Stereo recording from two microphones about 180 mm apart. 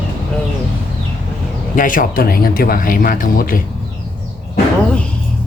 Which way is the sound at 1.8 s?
50° left (ahead or behind).